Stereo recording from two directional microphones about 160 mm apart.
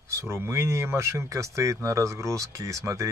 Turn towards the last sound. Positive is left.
turn(degrees=-20)  # may be behind; listen again after turning